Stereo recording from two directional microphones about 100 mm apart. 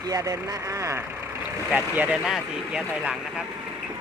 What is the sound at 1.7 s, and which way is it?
Speech, 15° right (ahead or behind).